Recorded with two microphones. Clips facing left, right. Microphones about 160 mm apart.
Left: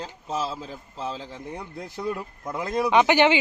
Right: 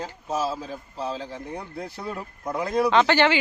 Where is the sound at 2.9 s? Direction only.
15° left (ahead or behind).